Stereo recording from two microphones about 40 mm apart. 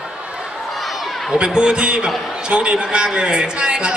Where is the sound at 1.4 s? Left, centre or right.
Right.